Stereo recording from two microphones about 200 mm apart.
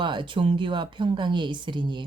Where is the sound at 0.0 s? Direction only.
25° right (ahead or behind).